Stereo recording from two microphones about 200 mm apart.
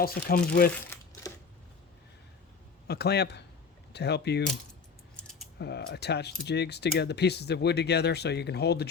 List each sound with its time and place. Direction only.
0.0 s speech: 50° left (ahead or behind)
1.2 s a sound: 15° left (ahead or behind)
2.8 s speech: 55° left (ahead or behind)
5.1 s mechanisms: centre (ahead or behind)
5.5 s speech: 55° left (ahead or behind)